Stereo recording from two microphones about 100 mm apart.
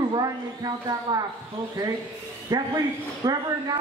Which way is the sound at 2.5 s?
40° right (ahead or behind).